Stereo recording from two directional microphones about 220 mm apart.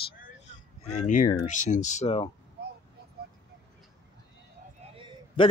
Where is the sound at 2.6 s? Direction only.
45° right (ahead or behind).